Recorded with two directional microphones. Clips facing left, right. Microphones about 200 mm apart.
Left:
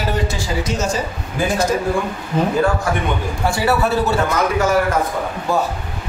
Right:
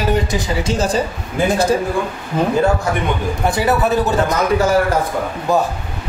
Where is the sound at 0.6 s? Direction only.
30° right (ahead or behind).